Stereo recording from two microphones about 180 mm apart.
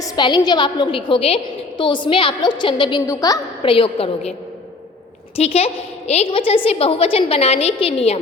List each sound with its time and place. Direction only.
0.0 s a woman's voice: 25° left (ahead or behind)
3.6 s a woman's voice: 30° left (ahead or behind)
5.4 s a woman's voice: 35° left (ahead or behind)